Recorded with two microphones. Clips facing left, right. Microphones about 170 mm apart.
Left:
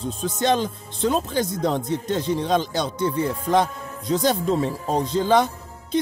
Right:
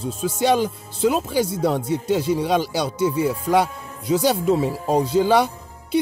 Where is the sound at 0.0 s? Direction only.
10° right (ahead or behind).